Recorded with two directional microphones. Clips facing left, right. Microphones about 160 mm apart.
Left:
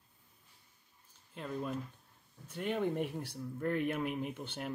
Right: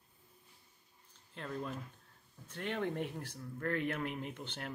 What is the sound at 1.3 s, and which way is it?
Speech, 10° left (ahead or behind).